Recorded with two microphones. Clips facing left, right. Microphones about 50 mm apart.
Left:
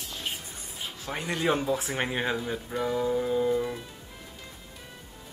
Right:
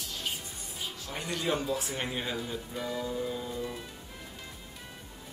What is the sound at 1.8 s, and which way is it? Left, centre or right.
Speech, left.